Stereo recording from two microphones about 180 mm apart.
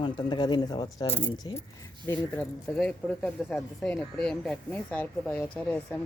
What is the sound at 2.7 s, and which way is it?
Speech, 5° left (ahead or behind).